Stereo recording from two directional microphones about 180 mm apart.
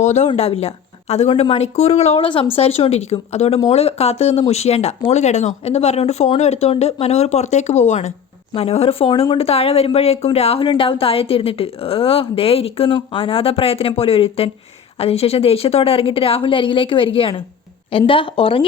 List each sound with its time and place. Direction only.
0.0 s a woman's voice: 40° left (ahead or behind)